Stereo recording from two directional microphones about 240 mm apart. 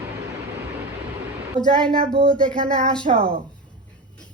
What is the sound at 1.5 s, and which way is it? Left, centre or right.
Speech, right.